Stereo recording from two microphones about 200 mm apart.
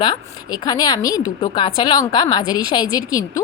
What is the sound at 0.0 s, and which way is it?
Speech, 20° left (ahead or behind).